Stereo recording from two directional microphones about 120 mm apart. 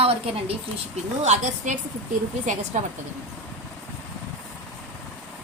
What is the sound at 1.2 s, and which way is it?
Speech, 90° right.